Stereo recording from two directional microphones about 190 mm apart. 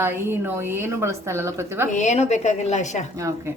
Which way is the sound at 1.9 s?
40° left (ahead or behind).